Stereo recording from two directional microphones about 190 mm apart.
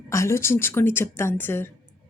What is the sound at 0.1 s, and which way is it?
A woman's voice, 15° left (ahead or behind).